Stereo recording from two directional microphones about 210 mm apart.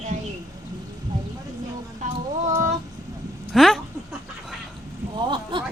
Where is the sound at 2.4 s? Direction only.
35° right (ahead or behind).